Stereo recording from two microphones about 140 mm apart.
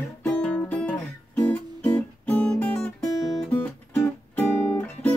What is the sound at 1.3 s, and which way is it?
Guitar, 10° left (ahead or behind).